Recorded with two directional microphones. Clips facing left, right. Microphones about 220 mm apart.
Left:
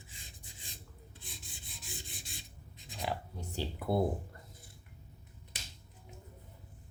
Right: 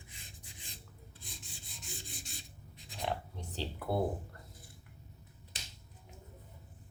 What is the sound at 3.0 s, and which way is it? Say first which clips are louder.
Writing: even; 5° left (ahead or behind).